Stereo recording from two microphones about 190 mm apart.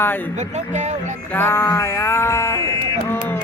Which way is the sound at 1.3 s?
10° left (ahead or behind).